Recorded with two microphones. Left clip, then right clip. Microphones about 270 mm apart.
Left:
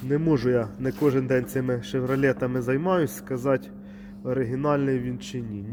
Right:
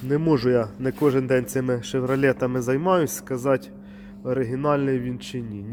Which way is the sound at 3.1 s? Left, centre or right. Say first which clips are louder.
Right 2 dB; centre.